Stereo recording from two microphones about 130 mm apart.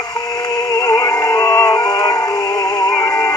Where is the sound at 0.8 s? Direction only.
25° left (ahead or behind).